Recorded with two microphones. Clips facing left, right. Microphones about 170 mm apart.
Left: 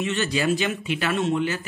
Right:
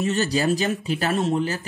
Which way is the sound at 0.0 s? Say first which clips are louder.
Right 2 dB; 40° right (ahead or behind).